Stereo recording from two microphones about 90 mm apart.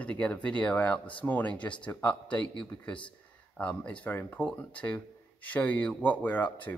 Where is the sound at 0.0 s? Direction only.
15° left (ahead or behind).